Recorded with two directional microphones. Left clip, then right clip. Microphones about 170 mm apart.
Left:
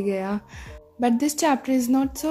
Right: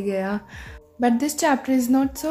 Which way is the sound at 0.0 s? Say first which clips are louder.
Right 1 dB; 35° left (ahead or behind).